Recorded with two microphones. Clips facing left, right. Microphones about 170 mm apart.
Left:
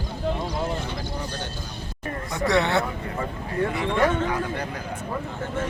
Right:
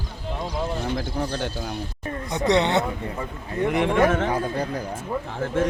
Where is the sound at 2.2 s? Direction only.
20° right (ahead or behind).